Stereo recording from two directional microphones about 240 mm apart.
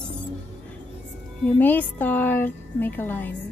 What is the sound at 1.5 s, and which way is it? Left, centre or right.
A woman's voice, centre.